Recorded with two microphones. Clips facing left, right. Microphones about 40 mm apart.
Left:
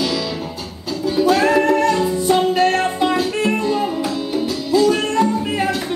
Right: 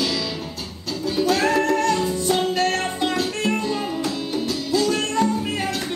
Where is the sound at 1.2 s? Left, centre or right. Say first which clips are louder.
Left 5 dB; centre.